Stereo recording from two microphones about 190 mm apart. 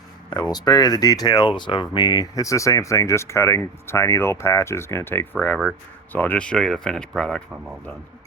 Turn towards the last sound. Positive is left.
turn(degrees=5)  # may be behind; listen again after turning